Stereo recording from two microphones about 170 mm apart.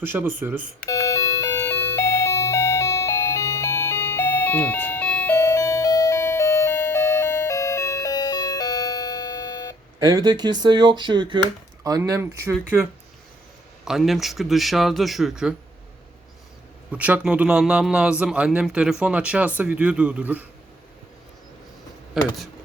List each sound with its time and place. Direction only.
0.0 s speech: 10° right (ahead or behind)
0.9 s doorbell: 20° left (ahead or behind)
10.0 s speech: 20° right (ahead or behind)
13.8 s speech: centre (ahead or behind)
16.9 s speech: 10° right (ahead or behind)